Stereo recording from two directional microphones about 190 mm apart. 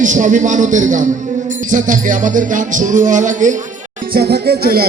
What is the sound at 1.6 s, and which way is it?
Music, 45° right (ahead or behind).